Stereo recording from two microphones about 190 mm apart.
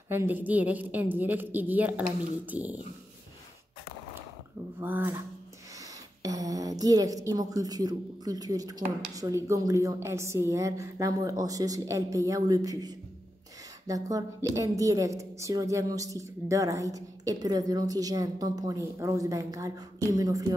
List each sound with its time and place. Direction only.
0.1 s a woman's voice: 10° right (ahead or behind)
4.7 s a woman's voice: 10° right (ahead or behind)
6.2 s a woman's voice: 20° right (ahead or behind)